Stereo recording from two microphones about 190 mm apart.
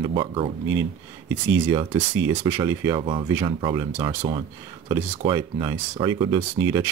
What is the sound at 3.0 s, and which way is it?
Speech, 30° right (ahead or behind).